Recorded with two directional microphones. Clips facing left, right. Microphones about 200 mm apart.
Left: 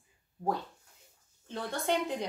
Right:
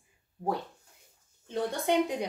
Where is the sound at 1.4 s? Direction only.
15° right (ahead or behind).